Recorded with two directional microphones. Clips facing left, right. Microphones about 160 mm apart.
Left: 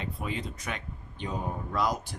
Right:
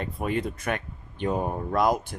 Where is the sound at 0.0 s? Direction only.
55° right (ahead or behind).